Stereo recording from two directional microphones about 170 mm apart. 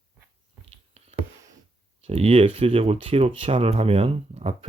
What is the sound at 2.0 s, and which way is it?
Speech, 35° right (ahead or behind).